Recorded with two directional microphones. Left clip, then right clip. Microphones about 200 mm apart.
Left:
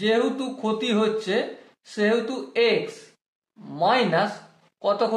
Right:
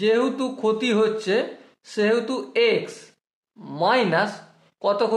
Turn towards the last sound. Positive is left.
turn(degrees=-40)  # may be behind; listen again after turning